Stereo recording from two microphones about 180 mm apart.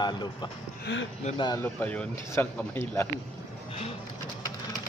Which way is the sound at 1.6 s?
10° left (ahead or behind).